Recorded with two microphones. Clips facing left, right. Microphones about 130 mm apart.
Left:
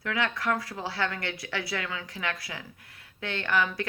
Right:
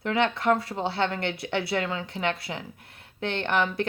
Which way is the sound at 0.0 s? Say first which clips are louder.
Right 5 dB; 25° right (ahead or behind).